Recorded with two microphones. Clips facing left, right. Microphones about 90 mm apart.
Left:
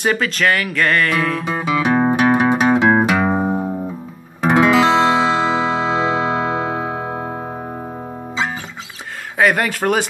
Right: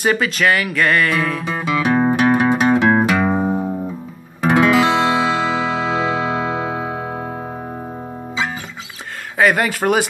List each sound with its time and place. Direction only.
0.0 s speech: 5° right (ahead or behind)
1.5 s music: 20° left (ahead or behind)
9.4 s speech: centre (ahead or behind)